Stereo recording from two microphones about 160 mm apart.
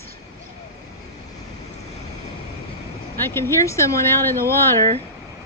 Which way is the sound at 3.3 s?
15° left (ahead or behind).